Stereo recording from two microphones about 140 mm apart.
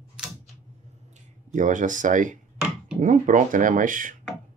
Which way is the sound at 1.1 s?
65° right (ahead or behind).